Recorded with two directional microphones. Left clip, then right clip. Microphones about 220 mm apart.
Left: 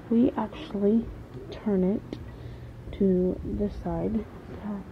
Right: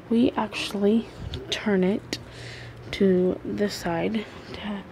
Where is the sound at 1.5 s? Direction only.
60° right (ahead or behind).